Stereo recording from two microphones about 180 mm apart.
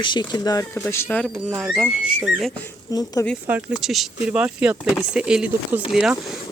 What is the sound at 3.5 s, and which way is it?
Speech, 10° right (ahead or behind).